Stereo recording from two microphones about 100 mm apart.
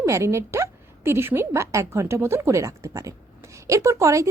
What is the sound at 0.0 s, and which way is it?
A woman's voice, 30° right (ahead or behind).